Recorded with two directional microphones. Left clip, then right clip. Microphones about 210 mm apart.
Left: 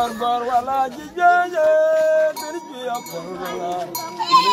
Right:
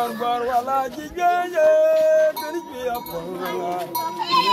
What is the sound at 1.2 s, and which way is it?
Music, 25° right (ahead or behind).